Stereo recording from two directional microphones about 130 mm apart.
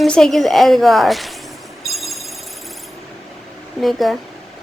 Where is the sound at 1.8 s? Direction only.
Centre (ahead or behind).